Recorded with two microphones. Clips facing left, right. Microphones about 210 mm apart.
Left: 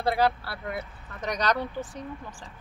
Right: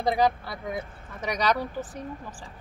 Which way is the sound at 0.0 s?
15° right (ahead or behind).